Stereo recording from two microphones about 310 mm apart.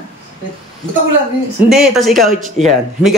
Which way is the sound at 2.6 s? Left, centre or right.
Right.